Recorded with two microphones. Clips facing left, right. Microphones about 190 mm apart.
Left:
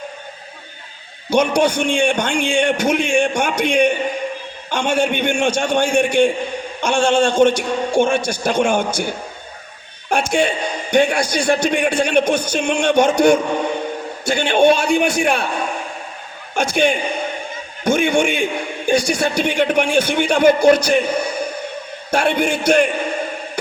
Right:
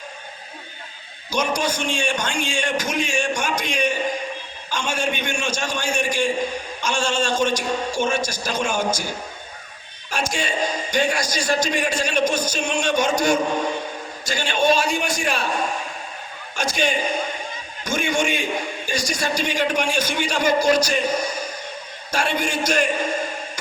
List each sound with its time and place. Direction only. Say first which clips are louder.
1.3 s a man's voice: left 8 dB; 60° left (ahead or behind)
16.6 s a man's voice: left 6 dB; 60° left (ahead or behind)